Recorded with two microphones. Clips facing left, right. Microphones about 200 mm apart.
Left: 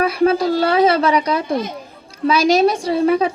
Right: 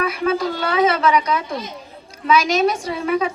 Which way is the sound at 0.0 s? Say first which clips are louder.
Left 5 dB; 35° left (ahead or behind).